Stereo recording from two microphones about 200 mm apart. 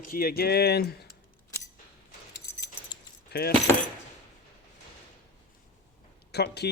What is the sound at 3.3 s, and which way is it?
Speech, 55° left (ahead or behind).